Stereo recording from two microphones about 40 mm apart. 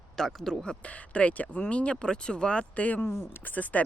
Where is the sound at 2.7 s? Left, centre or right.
Left.